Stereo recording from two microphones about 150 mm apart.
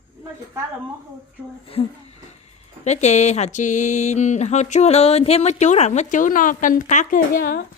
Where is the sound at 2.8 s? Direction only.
50° left (ahead or behind); by 7.6 s 75° left (ahead or behind).